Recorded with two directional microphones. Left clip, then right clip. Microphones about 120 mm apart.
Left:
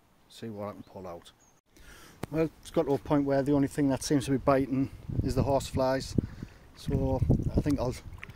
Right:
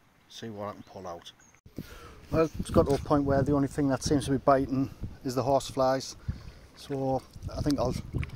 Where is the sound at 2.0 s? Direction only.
15° left (ahead or behind).